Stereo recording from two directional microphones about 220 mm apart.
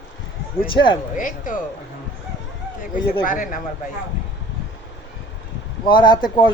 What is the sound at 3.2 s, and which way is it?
Speech, 40° left (ahead or behind).